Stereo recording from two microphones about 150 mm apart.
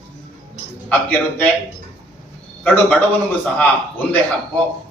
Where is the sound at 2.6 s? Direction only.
10° left (ahead or behind).